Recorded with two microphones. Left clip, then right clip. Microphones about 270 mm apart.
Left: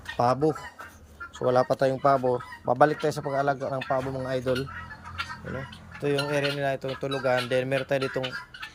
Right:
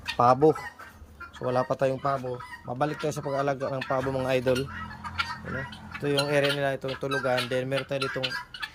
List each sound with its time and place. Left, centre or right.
0.2 s speech: centre
2.2 s speech: left
2.7 s speech: centre
3.8 s speech: centre
6.0 s speech: centre